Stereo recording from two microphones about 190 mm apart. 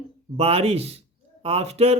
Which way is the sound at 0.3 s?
30° right (ahead or behind).